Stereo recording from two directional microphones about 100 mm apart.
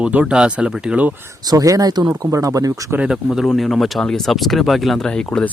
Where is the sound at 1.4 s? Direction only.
40° right (ahead or behind).